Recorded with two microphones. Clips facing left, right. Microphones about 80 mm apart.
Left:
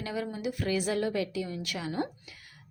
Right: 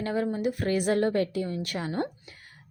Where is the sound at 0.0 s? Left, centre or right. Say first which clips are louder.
Right 6 dB; right.